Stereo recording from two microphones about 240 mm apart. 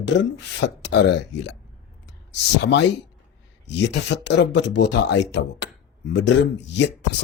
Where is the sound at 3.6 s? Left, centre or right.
Left.